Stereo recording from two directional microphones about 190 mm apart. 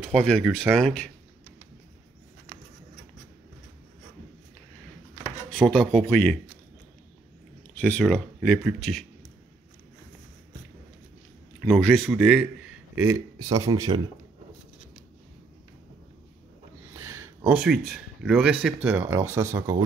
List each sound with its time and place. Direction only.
0.0 s speech: 5° left (ahead or behind)
5.5 s speech: centre (ahead or behind)
7.7 s speech: 5° left (ahead or behind)
11.6 s speech: centre (ahead or behind); by 14.0 s 20° right (ahead or behind)
17.0 s a sound: 15° right (ahead or behind)
17.5 s speech: 5° right (ahead or behind)